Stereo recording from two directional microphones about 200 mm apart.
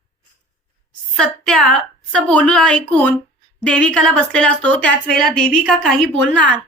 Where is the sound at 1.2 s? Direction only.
5° left (ahead or behind).